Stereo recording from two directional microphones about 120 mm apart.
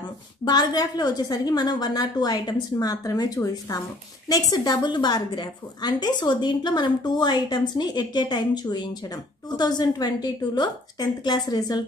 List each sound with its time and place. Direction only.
0.5 s a woman's voice: 35° left (ahead or behind)